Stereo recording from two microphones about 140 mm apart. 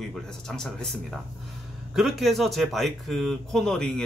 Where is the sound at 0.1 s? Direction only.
Centre (ahead or behind).